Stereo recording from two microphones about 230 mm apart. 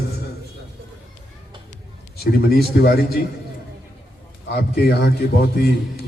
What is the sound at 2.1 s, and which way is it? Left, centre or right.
A man's voice, left.